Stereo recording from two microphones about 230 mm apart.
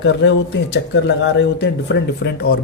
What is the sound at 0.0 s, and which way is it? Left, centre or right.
Speech, left.